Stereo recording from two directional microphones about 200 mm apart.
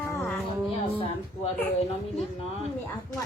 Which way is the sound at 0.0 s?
10° left (ahead or behind).